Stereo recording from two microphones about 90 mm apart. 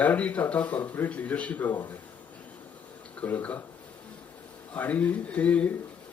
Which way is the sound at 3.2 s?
20° left (ahead or behind).